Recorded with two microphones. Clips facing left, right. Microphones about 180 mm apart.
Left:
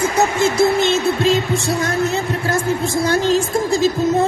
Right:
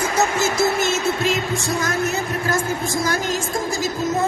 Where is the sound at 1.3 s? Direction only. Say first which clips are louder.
Left 5 dB; 30° left (ahead or behind).